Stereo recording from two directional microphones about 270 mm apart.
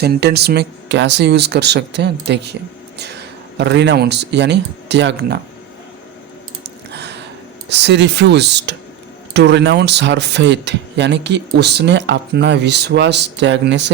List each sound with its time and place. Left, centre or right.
0.0 s speech: right
6.9 s gasp: right
7.7 s speech: right